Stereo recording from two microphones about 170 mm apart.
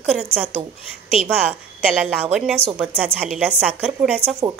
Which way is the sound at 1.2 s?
35° left (ahead or behind).